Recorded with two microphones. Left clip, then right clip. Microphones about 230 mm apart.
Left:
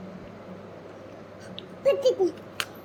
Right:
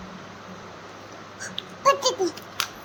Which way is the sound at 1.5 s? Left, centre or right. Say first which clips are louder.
Right 3 dB; right.